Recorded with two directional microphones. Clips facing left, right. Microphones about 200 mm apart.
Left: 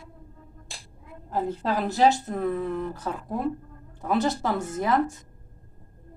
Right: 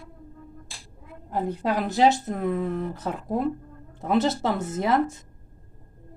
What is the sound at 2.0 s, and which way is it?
Speech, 20° right (ahead or behind).